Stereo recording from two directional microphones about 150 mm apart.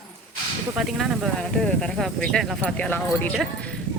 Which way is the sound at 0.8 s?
Centre (ahead or behind).